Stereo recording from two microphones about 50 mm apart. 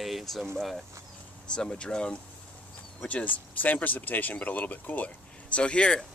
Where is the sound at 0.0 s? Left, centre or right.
Centre.